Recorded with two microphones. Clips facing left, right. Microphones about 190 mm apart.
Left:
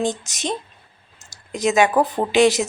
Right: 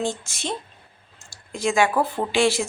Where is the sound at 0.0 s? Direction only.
20° left (ahead or behind).